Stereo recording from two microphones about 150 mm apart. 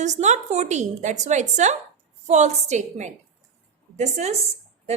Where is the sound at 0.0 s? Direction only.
50° right (ahead or behind).